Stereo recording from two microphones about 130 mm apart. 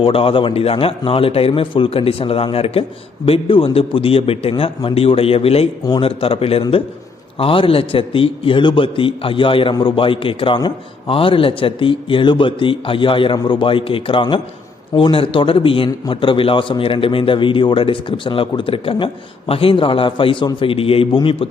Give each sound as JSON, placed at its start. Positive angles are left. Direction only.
{"t": 0.0, "sound": "a man's voice", "side_deg": 45}